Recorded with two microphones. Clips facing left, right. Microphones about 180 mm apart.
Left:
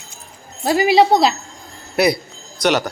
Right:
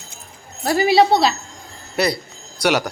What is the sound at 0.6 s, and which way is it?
Speech, 15° left (ahead or behind).